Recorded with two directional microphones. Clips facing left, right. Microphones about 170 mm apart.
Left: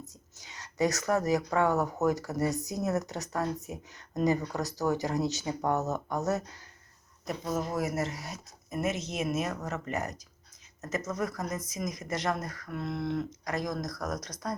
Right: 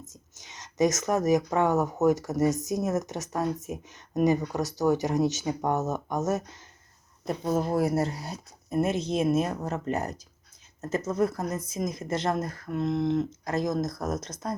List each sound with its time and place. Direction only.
0.3 s speech: 20° right (ahead or behind)
7.3 s speech: 30° right (ahead or behind)